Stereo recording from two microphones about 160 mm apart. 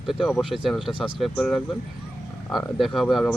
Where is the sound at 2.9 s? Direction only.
Centre (ahead or behind).